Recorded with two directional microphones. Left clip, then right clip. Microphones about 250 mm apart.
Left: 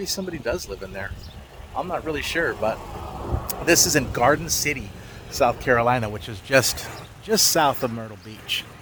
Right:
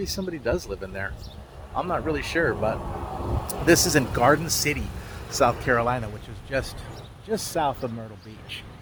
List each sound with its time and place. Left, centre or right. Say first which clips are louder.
0.0 s speech: left 1 dB; centre
5.6 s speech: left 3 dB; centre
5.9 s a man's voice: left 6 dB; left